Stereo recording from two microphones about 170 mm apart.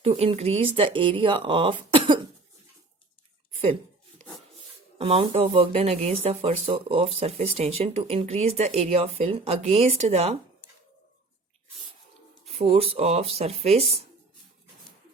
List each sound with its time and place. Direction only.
0.0 s speech: 35° right (ahead or behind)
3.5 s a sound: 35° right (ahead or behind)
4.9 s speech: 35° right (ahead or behind)
12.5 s speech: 35° right (ahead or behind)